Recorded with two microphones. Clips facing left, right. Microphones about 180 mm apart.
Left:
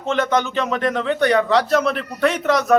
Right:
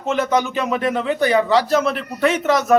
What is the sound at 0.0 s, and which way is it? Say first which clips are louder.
Speech: right 1 dB; 5° right (ahead or behind).